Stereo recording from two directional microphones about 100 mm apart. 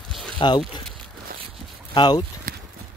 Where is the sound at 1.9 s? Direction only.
45° left (ahead or behind).